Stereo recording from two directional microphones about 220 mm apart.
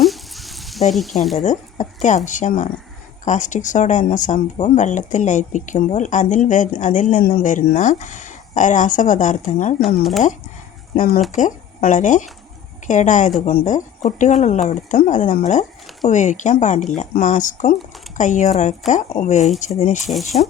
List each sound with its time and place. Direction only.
0.0 s sizzle: centre (ahead or behind)
0.9 s speech: centre (ahead or behind)
1.5 s speech: 35° left (ahead or behind)
10.0 s speech: centre (ahead or behind)
10.9 s speech: 40° left (ahead or behind)